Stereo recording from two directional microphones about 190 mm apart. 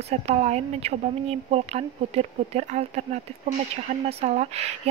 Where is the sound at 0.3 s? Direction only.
35° right (ahead or behind).